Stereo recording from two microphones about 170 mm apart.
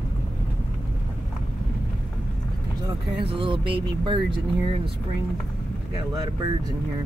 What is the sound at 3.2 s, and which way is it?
Music, 30° right (ahead or behind).